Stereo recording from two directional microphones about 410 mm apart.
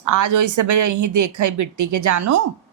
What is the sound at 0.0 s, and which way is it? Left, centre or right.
A woman's voice, right.